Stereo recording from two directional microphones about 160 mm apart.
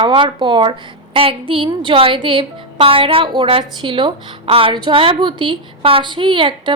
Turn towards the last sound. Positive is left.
turn(degrees=-30)  # may be behind; listen again after turning